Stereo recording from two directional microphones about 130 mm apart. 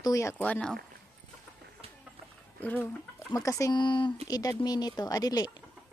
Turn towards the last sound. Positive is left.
turn(degrees=30)  # may be behind; listen again after turning